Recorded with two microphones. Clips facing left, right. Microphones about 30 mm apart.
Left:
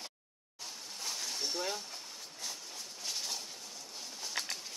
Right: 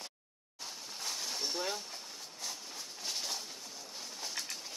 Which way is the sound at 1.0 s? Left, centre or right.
Centre.